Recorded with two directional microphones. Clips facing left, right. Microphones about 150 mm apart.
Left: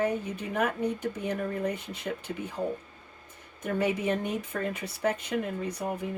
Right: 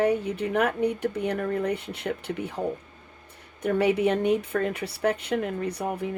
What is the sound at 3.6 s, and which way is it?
Speech, 65° right (ahead or behind).